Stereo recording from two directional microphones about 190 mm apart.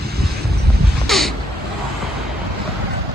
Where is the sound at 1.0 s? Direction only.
Centre (ahead or behind).